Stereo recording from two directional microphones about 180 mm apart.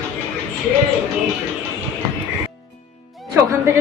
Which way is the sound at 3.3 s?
15° right (ahead or behind).